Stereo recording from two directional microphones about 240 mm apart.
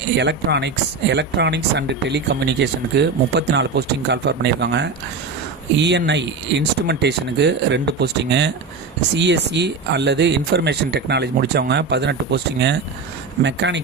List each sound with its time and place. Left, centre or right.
0.2 s speech: right